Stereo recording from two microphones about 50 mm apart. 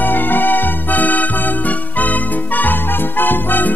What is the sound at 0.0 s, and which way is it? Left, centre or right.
Music, left.